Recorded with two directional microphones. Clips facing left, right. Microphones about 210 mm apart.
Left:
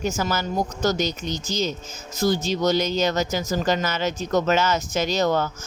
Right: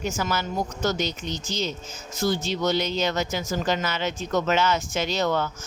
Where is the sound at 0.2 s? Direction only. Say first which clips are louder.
Left 2 dB; 40° left (ahead or behind).